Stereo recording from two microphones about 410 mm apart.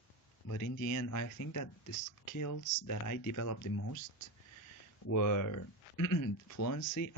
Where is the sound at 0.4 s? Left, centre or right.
Left.